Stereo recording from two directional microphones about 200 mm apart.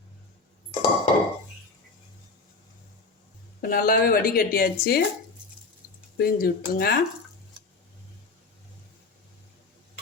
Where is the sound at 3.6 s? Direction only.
45° left (ahead or behind).